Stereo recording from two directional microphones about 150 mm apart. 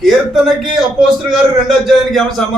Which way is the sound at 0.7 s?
5° right (ahead or behind).